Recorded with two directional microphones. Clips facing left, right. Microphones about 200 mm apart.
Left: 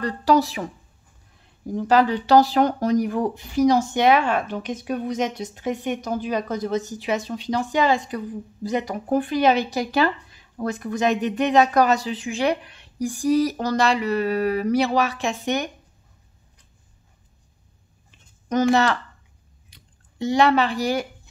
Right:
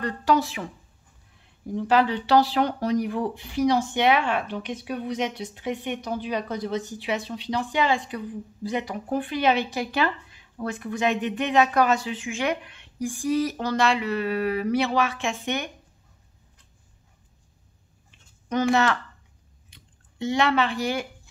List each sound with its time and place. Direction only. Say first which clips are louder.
0.0 s speech: left 4 dB; 35° left (ahead or behind)
18.5 s speech: left 3 dB; 40° left (ahead or behind)